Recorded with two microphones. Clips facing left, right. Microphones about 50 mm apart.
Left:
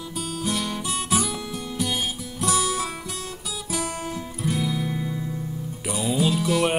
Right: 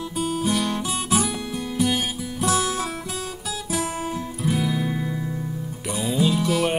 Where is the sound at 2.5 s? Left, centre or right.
Right.